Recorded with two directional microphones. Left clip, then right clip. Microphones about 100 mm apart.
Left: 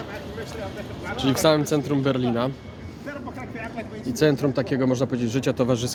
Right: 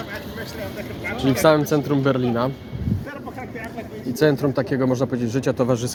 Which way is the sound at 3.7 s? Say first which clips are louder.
Right 1 dB; 10° left (ahead or behind).